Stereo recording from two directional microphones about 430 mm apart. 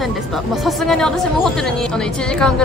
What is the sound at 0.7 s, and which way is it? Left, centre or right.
Speech, centre.